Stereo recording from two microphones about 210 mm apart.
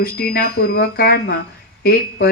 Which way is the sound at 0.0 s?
45° left (ahead or behind).